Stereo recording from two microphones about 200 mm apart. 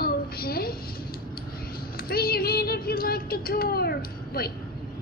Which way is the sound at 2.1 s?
50° left (ahead or behind).